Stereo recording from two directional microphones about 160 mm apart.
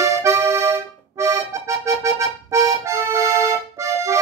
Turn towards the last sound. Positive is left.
turn(degrees=-20)  # may be behind; listen again after turning